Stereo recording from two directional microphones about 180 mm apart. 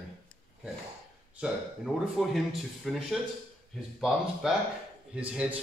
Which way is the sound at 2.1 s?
Centre (ahead or behind).